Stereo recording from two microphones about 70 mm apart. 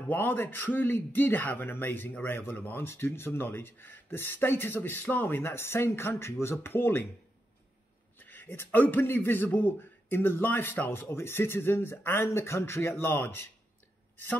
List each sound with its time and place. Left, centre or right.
0.1 s a man's voice: left
8.2 s a man's voice: left